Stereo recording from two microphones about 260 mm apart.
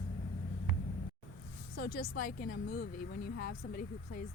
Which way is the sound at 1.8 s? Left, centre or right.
Left.